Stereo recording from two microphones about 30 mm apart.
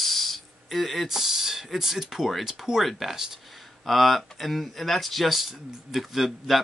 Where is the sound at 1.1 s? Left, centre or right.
Centre.